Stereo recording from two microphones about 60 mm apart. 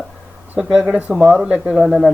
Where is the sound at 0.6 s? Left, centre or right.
Centre.